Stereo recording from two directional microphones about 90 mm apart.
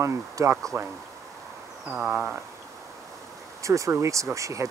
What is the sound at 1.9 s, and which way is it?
Speech, 15° right (ahead or behind).